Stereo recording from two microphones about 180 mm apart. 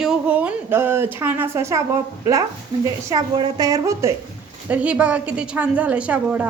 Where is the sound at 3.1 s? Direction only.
20° right (ahead or behind); by 6.4 s 5° right (ahead or behind).